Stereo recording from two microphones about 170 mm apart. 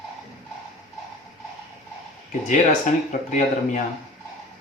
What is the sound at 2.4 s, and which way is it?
Speech, 50° left (ahead or behind).